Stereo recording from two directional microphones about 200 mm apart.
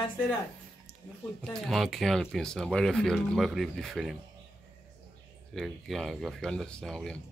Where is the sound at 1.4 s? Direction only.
Centre (ahead or behind).